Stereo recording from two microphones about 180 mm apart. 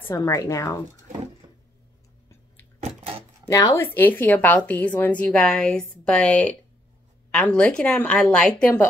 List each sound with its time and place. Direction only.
0.1 s a woman's voice: 20° left (ahead or behind)
3.0 s a sound: 35° right (ahead or behind)
3.5 s a woman's voice: 15° left (ahead or behind)